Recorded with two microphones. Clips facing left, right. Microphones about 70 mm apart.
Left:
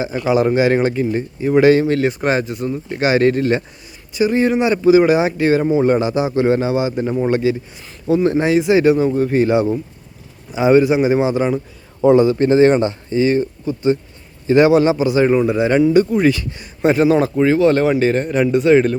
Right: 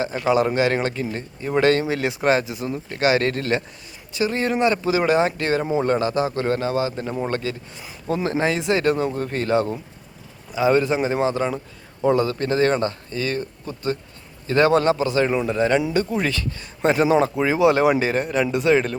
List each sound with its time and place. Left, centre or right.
0.0 s a man's voice: centre
10.8 s speech: centre
16.9 s speech: centre